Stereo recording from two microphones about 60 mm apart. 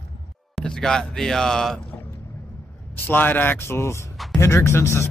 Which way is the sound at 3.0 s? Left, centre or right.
Left.